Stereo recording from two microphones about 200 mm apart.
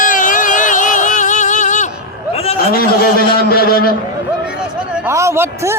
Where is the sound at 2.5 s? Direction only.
45° left (ahead or behind).